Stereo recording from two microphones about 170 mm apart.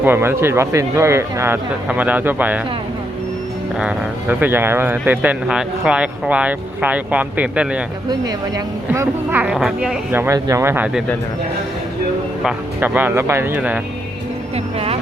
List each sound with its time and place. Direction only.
0.0 s speech: 15° right (ahead or behind)
3.8 s speech: 10° right (ahead or behind)
8.9 s speech: 10° right (ahead or behind)
12.4 s speech: 5° right (ahead or behind)
14.5 s speech: 35° right (ahead or behind)